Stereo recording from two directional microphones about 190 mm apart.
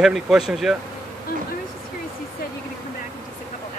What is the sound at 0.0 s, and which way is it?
Speech, 5° right (ahead or behind).